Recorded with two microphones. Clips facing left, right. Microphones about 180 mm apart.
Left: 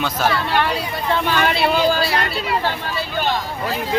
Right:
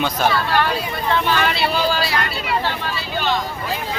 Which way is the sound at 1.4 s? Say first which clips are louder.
Left 2 dB; 50° left (ahead or behind).